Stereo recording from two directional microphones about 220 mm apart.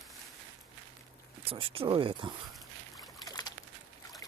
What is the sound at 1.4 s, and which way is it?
Speech, 25° right (ahead or behind).